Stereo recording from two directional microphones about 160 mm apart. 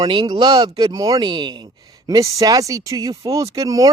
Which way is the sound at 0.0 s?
25° right (ahead or behind).